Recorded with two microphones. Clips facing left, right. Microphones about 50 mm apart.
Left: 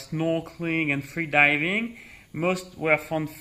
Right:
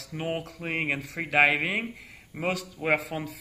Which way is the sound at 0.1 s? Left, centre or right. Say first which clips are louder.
Left 7 dB; centre.